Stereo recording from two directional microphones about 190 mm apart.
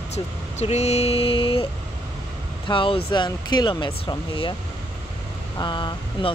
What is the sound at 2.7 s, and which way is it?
Speech, 25° left (ahead or behind).